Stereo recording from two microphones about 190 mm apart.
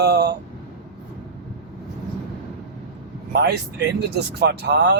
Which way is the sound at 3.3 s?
60° right (ahead or behind).